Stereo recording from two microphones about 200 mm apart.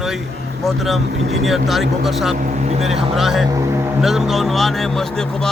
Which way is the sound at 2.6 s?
30° right (ahead or behind).